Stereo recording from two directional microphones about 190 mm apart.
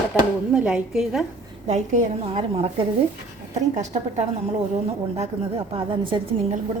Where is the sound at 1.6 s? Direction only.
40° right (ahead or behind).